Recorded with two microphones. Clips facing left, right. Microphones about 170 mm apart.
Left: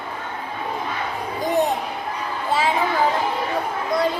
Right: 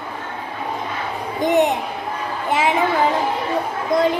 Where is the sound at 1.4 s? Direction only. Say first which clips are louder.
Right 4 dB; 20° right (ahead or behind).